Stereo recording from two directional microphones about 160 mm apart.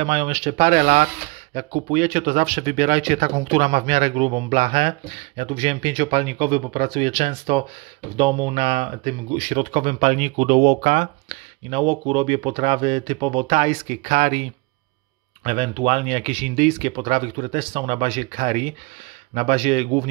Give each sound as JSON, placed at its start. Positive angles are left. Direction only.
{"t": 0.0, "sound": "speech", "side_deg": -40}
{"t": 15.4, "sound": "speech", "side_deg": -45}